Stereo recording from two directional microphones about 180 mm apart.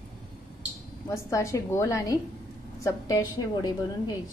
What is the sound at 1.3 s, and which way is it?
A woman's voice, 15° left (ahead or behind).